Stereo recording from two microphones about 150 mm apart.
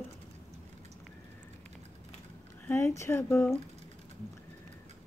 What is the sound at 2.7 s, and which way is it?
Speech, 15° left (ahead or behind).